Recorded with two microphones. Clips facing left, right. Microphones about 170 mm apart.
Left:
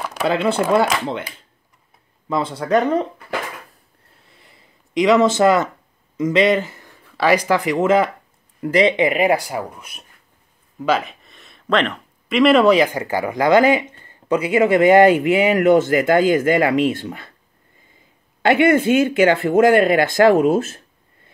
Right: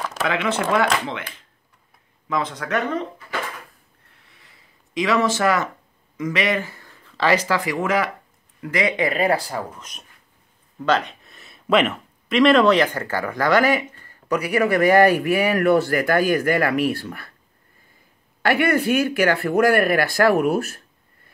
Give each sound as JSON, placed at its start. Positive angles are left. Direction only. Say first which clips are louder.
{"t": 0.2, "sound": "speech", "louder": "left 5 dB", "side_deg": 35}
{"t": 2.2, "sound": "speech", "louder": "left 4 dB", "side_deg": 30}
{"t": 4.3, "sound": "a sound", "louder": "left 4 dB", "side_deg": 25}
{"t": 6.1, "sound": "speech", "louder": "left 7 dB", "side_deg": 25}
{"t": 18.4, "sound": "speech", "louder": "left 5 dB", "side_deg": 20}